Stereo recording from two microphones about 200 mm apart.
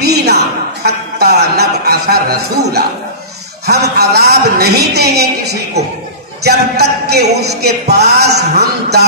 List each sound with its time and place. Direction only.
0.0 s a sound: 55° right (ahead or behind)
0.8 s speech: 55° right (ahead or behind)
6.4 s speech: 55° right (ahead or behind)